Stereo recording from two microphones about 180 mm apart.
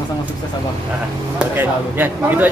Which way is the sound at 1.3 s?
10° right (ahead or behind).